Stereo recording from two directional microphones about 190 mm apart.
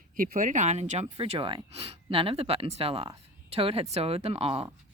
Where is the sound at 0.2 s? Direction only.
45° right (ahead or behind).